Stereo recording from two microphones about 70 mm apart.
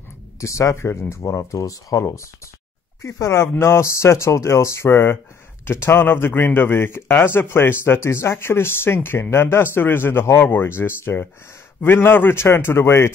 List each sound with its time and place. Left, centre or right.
0.4 s speech: left
3.0 s a man's voice: left